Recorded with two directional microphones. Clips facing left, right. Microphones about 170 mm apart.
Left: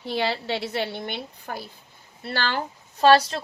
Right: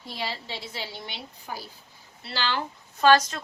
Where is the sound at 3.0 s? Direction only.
35° left (ahead or behind).